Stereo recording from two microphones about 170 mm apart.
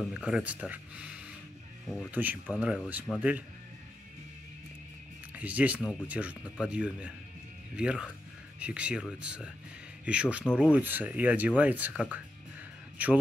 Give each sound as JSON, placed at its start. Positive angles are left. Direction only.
{"t": 0.1, "sound": "speech", "side_deg": -5}
{"t": 5.3, "sound": "speech", "side_deg": -10}